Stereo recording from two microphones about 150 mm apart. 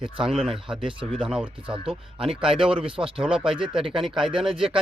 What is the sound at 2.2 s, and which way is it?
Speech, 5° right (ahead or behind).